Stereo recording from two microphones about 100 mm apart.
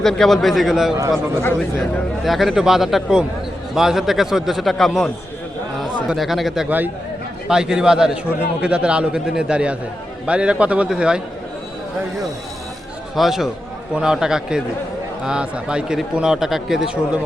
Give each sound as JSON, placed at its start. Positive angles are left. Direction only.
{"t": 0.0, "sound": "a man's voice", "side_deg": 5}
{"t": 1.4, "sound": "speech", "side_deg": 25}
{"t": 2.2, "sound": "a man's voice", "side_deg": 0}
{"t": 6.7, "sound": "speech", "side_deg": -20}
{"t": 7.4, "sound": "speech", "side_deg": -5}
{"t": 13.1, "sound": "a man's voice", "side_deg": -5}